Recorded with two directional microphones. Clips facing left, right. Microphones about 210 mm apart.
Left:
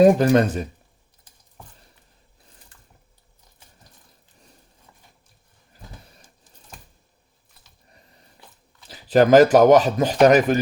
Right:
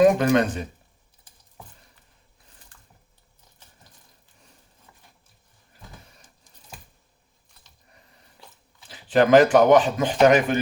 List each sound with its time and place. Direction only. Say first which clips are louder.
0.0 s speech: left 3 dB; 35° left (ahead or behind)
8.9 s speech: left 2 dB; 40° left (ahead or behind)